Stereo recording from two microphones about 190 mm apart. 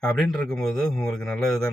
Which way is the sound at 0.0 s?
Centre (ahead or behind).